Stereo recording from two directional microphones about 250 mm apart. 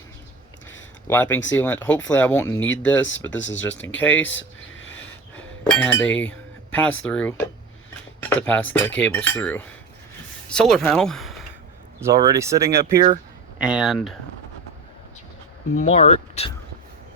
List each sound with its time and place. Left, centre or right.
1.0 s speech: centre
3.2 s speech: left
3.9 s speech: centre
5.4 s speech: centre
11.9 s speech: centre
13.6 s speech: centre
15.8 s speech: left